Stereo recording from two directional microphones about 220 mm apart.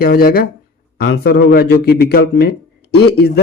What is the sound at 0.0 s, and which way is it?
Speech, 45° left (ahead or behind).